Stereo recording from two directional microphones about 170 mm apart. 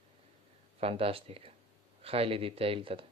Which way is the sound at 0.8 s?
35° right (ahead or behind).